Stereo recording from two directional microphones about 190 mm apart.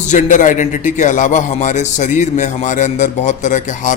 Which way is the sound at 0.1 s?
40° left (ahead or behind).